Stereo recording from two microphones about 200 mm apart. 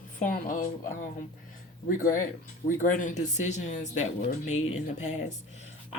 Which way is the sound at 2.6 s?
40° left (ahead or behind).